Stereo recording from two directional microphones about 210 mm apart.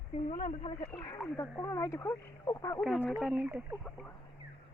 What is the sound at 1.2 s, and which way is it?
Speech, 10° left (ahead or behind).